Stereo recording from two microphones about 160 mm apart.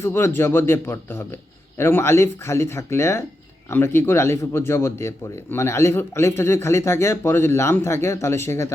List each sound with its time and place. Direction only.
0.0 s speech: 15° left (ahead or behind)